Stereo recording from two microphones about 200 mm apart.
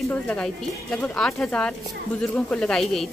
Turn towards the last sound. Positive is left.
turn(degrees=0)  # may be behind; listen again after turning